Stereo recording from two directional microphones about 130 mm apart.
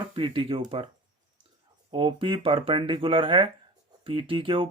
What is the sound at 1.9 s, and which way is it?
Speech, 40° right (ahead or behind).